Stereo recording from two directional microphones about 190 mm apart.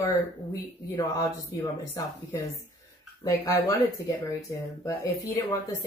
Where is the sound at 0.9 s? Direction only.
15° left (ahead or behind).